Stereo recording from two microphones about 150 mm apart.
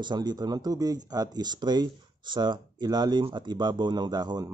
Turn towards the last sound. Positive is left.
turn(degrees=-25)  # may be behind; listen again after turning